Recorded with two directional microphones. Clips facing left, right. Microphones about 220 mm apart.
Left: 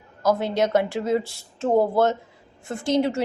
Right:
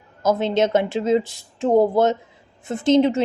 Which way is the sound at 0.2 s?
20° right (ahead or behind).